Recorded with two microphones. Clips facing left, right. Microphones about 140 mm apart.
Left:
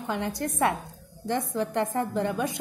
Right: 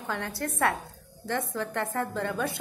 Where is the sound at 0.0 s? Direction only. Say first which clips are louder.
Left 3 dB; 15° left (ahead or behind).